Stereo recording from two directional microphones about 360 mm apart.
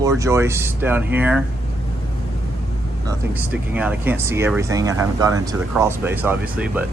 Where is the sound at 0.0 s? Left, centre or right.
Centre.